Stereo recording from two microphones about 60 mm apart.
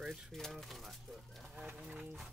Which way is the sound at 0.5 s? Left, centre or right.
Centre.